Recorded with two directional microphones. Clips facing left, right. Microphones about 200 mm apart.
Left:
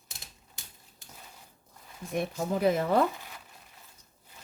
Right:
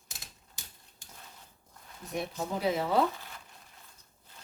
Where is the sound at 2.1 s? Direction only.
50° left (ahead or behind).